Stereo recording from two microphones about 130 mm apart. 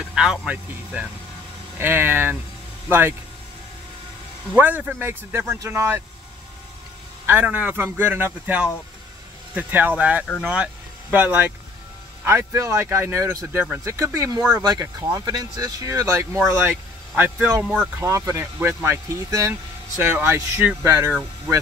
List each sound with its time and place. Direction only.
0.0 s speech: 5° right (ahead or behind)
4.6 s speech: 15° right (ahead or behind)
7.2 s speech: 15° right (ahead or behind)
12.3 s speech: 25° right (ahead or behind)
18.0 s speech: 25° right (ahead or behind)